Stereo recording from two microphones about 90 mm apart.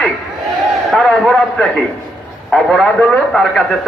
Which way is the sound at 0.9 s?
5° left (ahead or behind).